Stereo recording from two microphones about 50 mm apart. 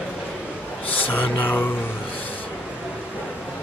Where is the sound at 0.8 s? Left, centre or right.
Left.